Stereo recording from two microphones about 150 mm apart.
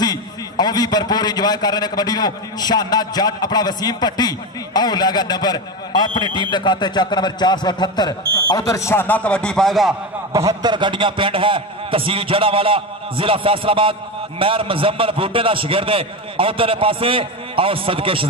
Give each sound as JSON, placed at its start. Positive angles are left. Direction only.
{"t": 0.0, "sound": "a man's voice", "side_deg": 25}
{"t": 10.3, "sound": "a man's voice", "side_deg": -25}